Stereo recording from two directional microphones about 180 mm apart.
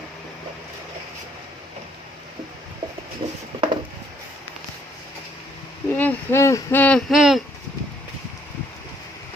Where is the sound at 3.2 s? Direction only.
25° right (ahead or behind).